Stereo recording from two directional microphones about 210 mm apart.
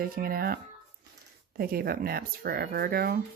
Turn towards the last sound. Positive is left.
turn(degrees=-45)  # may be behind; listen again after turning